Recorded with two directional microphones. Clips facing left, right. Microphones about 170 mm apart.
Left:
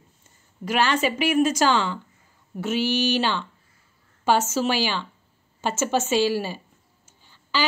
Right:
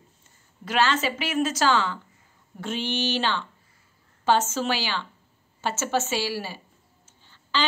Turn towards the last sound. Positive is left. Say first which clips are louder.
# left 1 dB
turn(degrees=10)  # may be behind; listen again after turning